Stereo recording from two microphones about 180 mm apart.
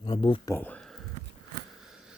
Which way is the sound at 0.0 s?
30° left (ahead or behind).